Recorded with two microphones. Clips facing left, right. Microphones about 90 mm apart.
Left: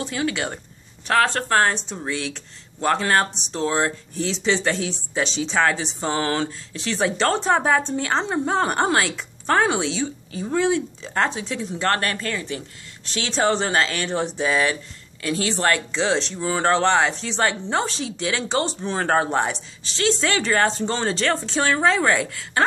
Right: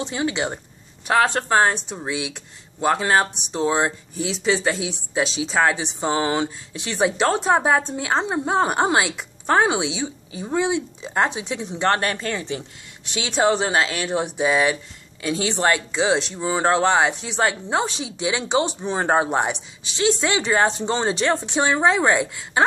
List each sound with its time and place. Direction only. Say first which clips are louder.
0.0 s speech: right 1 dB; 20° right (ahead or behind)